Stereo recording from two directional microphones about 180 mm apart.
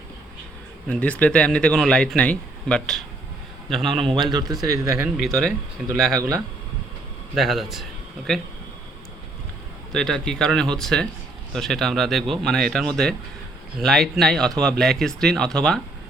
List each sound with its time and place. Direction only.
0.9 s speech: 10° left (ahead or behind)
4.1 s speech: 25° right (ahead or behind)
5.0 s speech: centre (ahead or behind)
7.3 s speech: centre (ahead or behind)
9.9 s speech: 5° left (ahead or behind)